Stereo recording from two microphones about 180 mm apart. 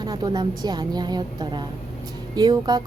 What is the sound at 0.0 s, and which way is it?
A woman's voice, 20° right (ahead or behind).